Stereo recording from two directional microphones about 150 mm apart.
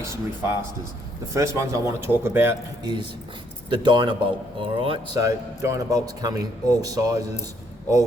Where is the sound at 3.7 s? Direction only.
30° right (ahead or behind).